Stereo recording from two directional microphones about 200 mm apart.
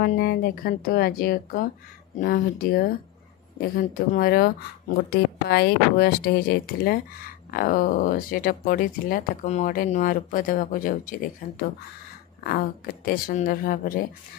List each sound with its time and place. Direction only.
0.0 s speech: 45° left (ahead or behind)